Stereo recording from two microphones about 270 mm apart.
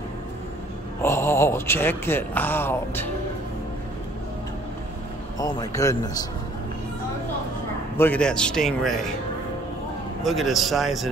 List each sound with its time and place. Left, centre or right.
1.0 s a man's voice: centre
5.4 s a man's voice: centre
8.0 s a man's voice: centre
10.2 s a man's voice: centre